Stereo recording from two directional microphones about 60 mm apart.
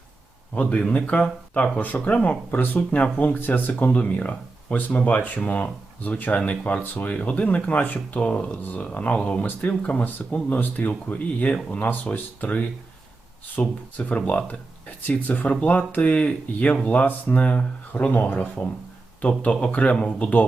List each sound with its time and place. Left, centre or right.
0.5 s speech: left